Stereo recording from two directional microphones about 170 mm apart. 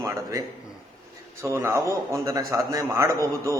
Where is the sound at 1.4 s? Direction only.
15° right (ahead or behind).